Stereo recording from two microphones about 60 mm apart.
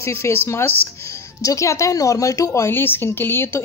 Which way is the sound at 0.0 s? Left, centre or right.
Left.